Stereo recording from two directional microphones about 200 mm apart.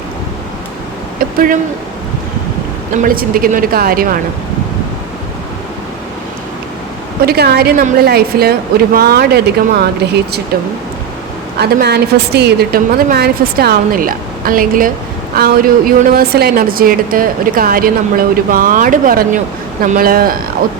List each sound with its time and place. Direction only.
1.2 s speech: 45° right (ahead or behind)
2.9 s a woman's voice: 45° right (ahead or behind)
7.3 s a woman's voice: 50° right (ahead or behind)
11.5 s a woman's voice: 50° right (ahead or behind)